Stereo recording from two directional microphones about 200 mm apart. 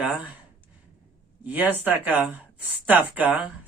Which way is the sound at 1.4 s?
10° right (ahead or behind).